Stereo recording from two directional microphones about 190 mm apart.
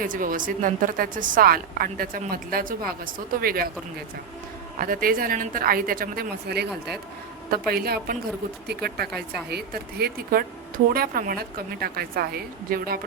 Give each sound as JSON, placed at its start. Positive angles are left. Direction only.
{"t": 0.0, "sound": "a woman's voice", "side_deg": -45}
{"t": 4.8, "sound": "a woman's voice", "side_deg": -50}
{"t": 7.7, "sound": "a woman's voice", "side_deg": -55}